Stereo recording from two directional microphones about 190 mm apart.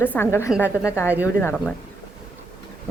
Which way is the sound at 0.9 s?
15° left (ahead or behind).